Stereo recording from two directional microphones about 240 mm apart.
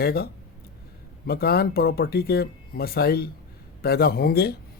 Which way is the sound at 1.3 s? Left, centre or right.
Left.